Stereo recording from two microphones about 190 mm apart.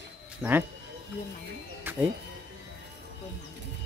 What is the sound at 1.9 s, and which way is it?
Music, 10° right (ahead or behind).